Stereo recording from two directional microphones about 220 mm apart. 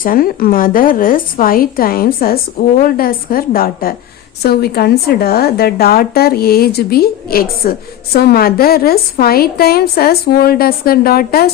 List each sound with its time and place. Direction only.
0.0 s a woman's voice: 40° left (ahead or behind)